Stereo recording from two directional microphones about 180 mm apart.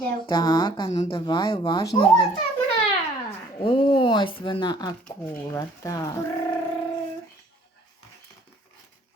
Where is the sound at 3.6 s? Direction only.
30° left (ahead or behind).